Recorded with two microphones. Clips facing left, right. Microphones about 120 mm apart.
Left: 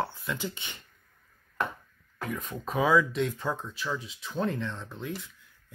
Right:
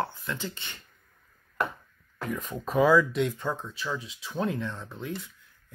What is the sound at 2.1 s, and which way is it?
Speech, centre (ahead or behind).